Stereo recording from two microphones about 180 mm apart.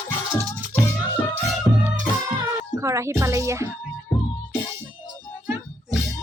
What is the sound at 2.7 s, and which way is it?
Music, 15° right (ahead or behind).